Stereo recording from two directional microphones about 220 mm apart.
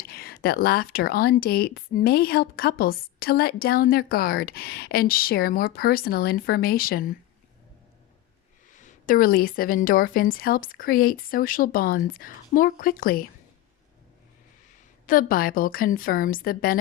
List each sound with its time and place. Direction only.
0.0 s speech: 45° left (ahead or behind)
8.7 s a woman's voice: 35° left (ahead or behind)
15.0 s a woman's voice: 40° left (ahead or behind)